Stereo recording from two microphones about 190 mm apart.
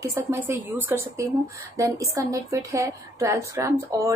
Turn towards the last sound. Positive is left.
turn(degrees=-15)  # may be behind; listen again after turning